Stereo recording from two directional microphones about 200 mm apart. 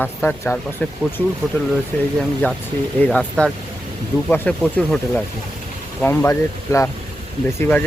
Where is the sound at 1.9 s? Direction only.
5° left (ahead or behind).